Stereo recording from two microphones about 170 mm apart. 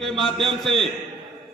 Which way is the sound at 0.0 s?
Centre (ahead or behind).